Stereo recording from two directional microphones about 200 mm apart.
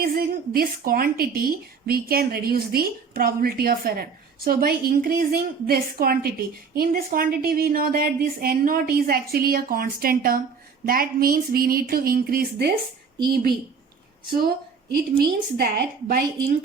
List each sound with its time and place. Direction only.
0.0 s a woman's voice: 50° right (ahead or behind)
15.2 s a woman's voice: 50° right (ahead or behind)